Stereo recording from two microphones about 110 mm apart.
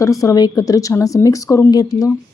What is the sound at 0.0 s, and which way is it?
Speech, 30° left (ahead or behind).